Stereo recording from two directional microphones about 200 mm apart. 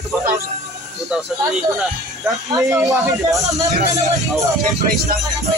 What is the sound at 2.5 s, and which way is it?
Speech, 15° right (ahead or behind).